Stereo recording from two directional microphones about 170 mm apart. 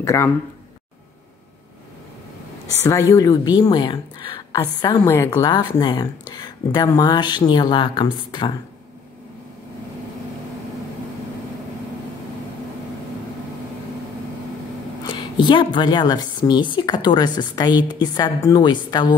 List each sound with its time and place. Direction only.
0.0 s speech: 15° left (ahead or behind)
2.8 s a woman's voice: 15° left (ahead or behind)
5.5 s a woman's voice: 25° left (ahead or behind)
15.0 s a woman's voice: 30° left (ahead or behind)